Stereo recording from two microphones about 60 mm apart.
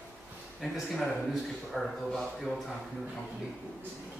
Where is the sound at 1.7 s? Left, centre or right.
Centre.